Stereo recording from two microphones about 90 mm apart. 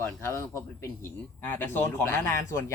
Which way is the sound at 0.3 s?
30° left (ahead or behind).